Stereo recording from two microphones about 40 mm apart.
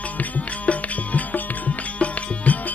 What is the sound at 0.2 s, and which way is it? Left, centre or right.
Music, left.